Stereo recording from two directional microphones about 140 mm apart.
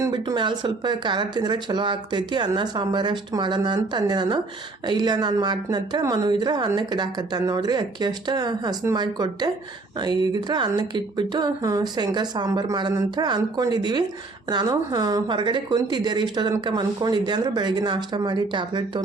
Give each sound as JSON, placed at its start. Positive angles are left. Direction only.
{"t": 0.1, "sound": "a woman's voice", "side_deg": -35}